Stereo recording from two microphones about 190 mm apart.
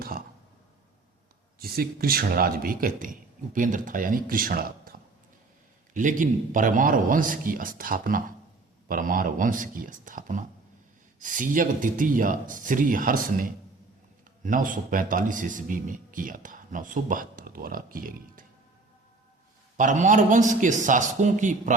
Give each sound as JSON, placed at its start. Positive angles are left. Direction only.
{"t": 1.5, "sound": "speech", "side_deg": -50}
{"t": 19.7, "sound": "a man's voice", "side_deg": -40}